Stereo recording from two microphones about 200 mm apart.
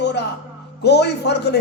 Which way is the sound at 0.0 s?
55° left (ahead or behind).